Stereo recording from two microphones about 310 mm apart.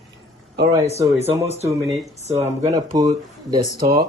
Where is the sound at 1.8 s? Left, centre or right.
Centre.